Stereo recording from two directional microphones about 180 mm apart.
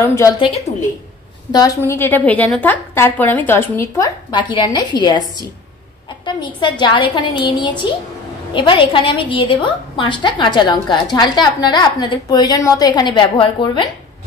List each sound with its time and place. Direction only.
0.0 s a woman's voice: 15° left (ahead or behind)
0.7 s a woman's voice: 40° left (ahead or behind)
1.5 s a woman's voice: 20° left (ahead or behind)